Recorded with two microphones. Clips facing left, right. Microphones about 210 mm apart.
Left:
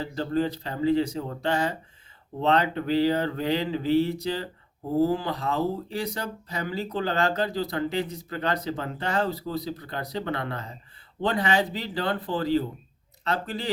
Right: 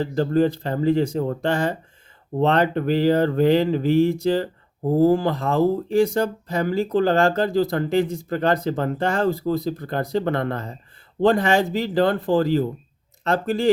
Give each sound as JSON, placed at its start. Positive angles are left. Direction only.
{"t": 0.0, "sound": "speech", "side_deg": -50}
{"t": 2.4, "sound": "speech", "side_deg": -50}